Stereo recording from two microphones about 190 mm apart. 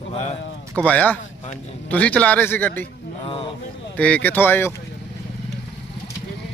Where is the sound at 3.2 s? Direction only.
25° left (ahead or behind).